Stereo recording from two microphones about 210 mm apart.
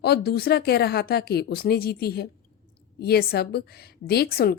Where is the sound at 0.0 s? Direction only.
50° left (ahead or behind).